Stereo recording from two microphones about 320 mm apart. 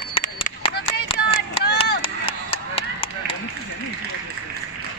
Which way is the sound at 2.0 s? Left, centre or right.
Centre.